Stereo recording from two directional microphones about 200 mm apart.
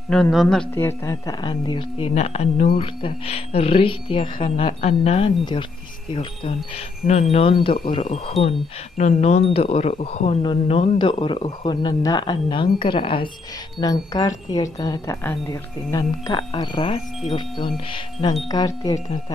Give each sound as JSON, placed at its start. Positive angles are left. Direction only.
{"t": 0.1, "sound": "speech", "side_deg": 0}
{"t": 0.7, "sound": "speech", "side_deg": 15}
{"t": 7.1, "sound": "speech", "side_deg": 30}